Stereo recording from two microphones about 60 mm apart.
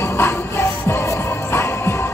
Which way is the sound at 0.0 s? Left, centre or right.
Left.